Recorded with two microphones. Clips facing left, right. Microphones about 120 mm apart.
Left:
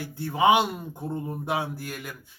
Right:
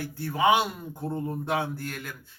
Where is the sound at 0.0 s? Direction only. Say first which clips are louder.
Left 2 dB; 20° left (ahead or behind).